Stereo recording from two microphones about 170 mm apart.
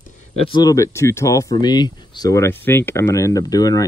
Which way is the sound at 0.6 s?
20° left (ahead or behind).